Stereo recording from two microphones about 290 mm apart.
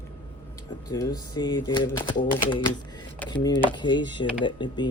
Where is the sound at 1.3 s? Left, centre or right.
Centre.